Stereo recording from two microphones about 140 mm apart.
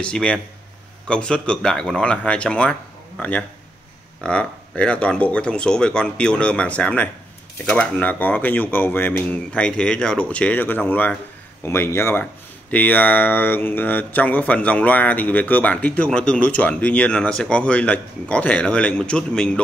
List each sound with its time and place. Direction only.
0.0 s speech: 5° left (ahead or behind)